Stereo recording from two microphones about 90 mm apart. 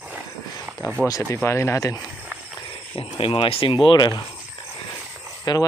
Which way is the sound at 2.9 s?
90° left.